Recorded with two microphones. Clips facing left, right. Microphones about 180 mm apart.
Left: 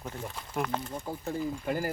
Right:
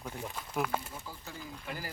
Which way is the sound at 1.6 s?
45° left (ahead or behind).